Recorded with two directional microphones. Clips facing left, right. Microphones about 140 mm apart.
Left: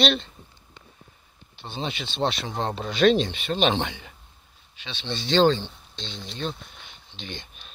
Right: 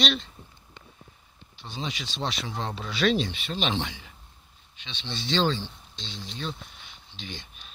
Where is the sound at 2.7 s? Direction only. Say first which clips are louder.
Left 6 dB; 50° left (ahead or behind).